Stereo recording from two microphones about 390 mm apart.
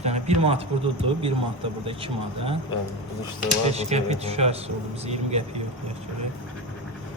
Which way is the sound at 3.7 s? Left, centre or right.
Centre.